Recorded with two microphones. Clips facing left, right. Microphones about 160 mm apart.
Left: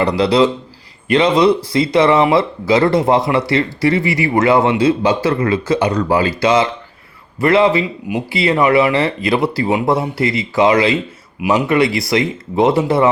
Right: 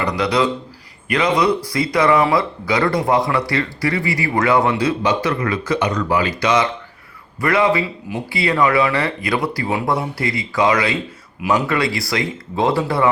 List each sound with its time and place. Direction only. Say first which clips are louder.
0.0 s speech: left 5 dB; 30° left (ahead or behind)